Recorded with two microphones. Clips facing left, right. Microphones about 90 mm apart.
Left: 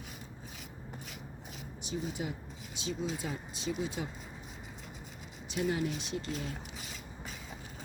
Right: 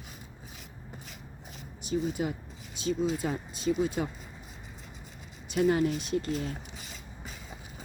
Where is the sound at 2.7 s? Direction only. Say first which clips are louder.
Right 7 dB; 45° right (ahead or behind).